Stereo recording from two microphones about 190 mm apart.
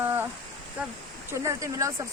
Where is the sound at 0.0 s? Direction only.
10° right (ahead or behind).